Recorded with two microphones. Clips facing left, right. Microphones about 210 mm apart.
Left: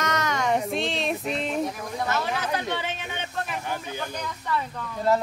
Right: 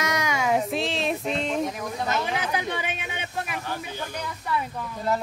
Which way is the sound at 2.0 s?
15° right (ahead or behind).